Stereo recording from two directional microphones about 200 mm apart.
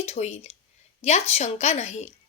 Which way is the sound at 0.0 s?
30° left (ahead or behind).